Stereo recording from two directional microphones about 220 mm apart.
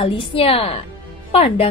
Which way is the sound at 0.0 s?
25° left (ahead or behind).